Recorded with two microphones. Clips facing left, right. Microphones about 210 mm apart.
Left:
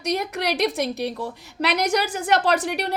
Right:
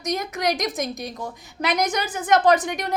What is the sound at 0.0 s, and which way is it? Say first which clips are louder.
A woman's voice: even; 65° left (ahead or behind).